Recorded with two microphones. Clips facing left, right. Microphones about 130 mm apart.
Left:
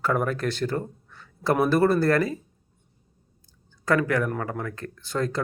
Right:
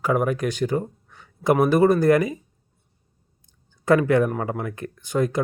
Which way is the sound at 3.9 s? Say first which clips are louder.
Right 5 dB; 20° right (ahead or behind).